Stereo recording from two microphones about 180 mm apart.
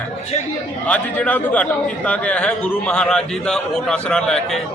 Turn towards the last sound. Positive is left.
turn(degrees=5)  # may be behind; listen again after turning